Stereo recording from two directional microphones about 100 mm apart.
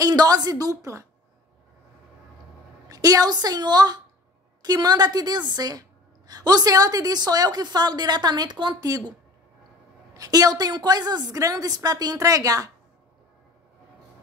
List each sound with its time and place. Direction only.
0.0 s a woman's voice: 40° right (ahead or behind)
2.9 s a woman's voice: 35° right (ahead or behind)
10.1 s a woman's voice: 40° right (ahead or behind)